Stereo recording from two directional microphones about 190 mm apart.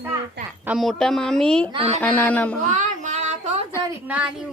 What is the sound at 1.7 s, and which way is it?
Speech, 30° right (ahead or behind).